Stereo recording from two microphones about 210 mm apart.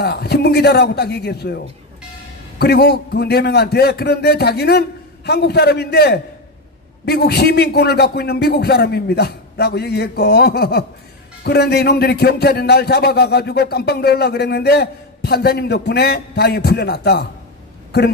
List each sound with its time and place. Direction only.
0.0 s a man's voice: 50° left (ahead or behind)
2.6 s a man's voice: 50° left (ahead or behind)